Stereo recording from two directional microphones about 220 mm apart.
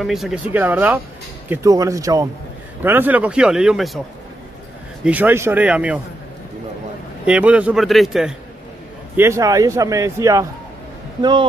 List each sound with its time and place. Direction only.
0.0 s a man's voice: centre (ahead or behind)
5.0 s a man's voice: 10° right (ahead or behind)
7.2 s a man's voice: 5° right (ahead or behind)